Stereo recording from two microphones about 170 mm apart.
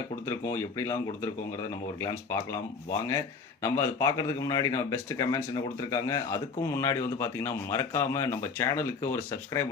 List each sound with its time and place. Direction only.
0.3 s a man's voice: 15° left (ahead or behind)
3.6 s a man's voice: 20° left (ahead or behind)